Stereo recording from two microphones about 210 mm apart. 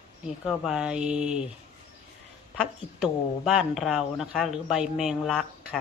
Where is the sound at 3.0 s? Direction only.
Centre (ahead or behind).